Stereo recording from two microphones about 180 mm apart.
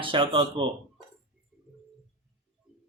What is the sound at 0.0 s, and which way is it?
Speech, 30° right (ahead or behind).